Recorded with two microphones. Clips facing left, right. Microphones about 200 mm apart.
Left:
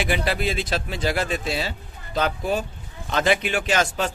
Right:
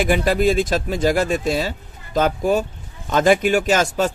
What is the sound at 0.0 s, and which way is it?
Speech, 45° right (ahead or behind).